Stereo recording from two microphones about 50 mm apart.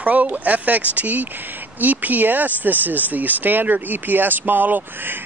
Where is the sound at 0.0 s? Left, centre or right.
Right.